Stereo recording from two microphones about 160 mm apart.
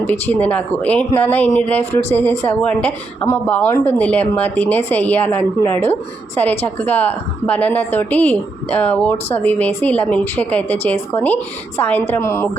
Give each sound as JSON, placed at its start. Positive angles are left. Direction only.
{"t": 0.1, "sound": "a woman's voice", "side_deg": 10}